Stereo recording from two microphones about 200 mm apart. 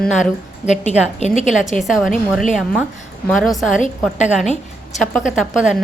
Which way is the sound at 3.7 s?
40° left (ahead or behind).